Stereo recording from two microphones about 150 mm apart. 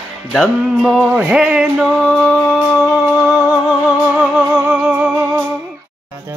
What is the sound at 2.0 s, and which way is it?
Music, 5° left (ahead or behind).